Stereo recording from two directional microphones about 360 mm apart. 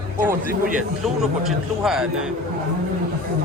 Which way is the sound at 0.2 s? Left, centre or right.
Right.